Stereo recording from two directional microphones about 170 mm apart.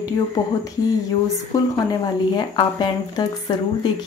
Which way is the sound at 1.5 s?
20° left (ahead or behind).